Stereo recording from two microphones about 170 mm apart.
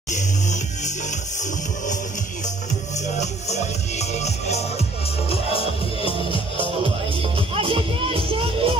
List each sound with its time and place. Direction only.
0.1 s music: 45° left (ahead or behind)
3.2 s music: 40° left (ahead or behind)
6.5 s music: 30° right (ahead or behind)